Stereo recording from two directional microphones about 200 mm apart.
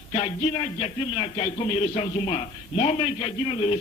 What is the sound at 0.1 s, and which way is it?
Speech, 30° left (ahead or behind).